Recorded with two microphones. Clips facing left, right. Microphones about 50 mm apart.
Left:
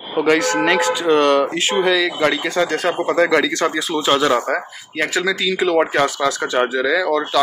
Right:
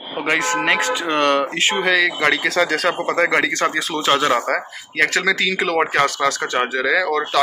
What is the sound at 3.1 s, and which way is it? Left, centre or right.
Speech, right.